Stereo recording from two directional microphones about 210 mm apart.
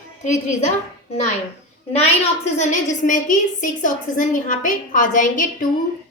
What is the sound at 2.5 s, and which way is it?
A woman's voice, 35° left (ahead or behind).